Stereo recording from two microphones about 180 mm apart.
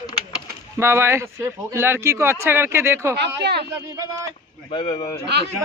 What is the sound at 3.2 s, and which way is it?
Speech, 70° right (ahead or behind).